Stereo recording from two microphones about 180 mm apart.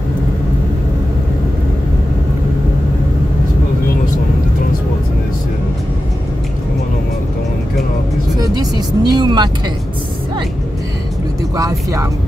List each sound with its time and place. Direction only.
8.4 s vehicle: 20° right (ahead or behind)
11.5 s speech: 20° right (ahead or behind)